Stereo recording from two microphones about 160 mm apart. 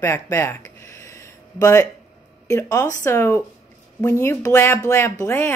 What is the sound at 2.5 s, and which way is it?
A woman's voice, 20° left (ahead or behind).